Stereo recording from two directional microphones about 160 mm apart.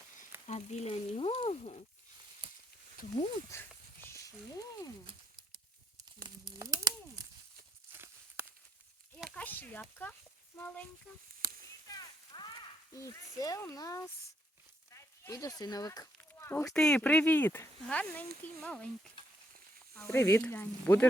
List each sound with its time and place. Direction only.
0.2 s speech: 45° left (ahead or behind)
3.0 s speech: 60° left (ahead or behind)
3.5 s a sound: 15° left (ahead or behind)
6.6 s a sound: 20° right (ahead or behind)
7.9 s walk: 15° right (ahead or behind)
9.3 s speech: 10° left (ahead or behind)
11.4 s a sound: 65° right (ahead or behind)
11.9 s a sound: 25° left (ahead or behind)
12.9 s speech: 20° left (ahead or behind)
16.7 s speech: 5° left (ahead or behind)
19.2 s frying: 30° left (ahead or behind)
20.1 s speech: 15° left (ahead or behind)